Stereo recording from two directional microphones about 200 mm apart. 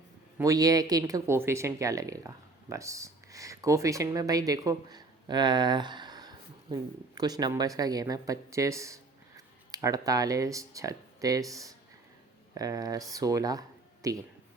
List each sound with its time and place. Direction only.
0.3 s speech: 15° right (ahead or behind)